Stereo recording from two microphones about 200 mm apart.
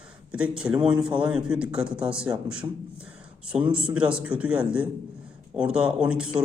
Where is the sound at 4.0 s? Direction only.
5° right (ahead or behind).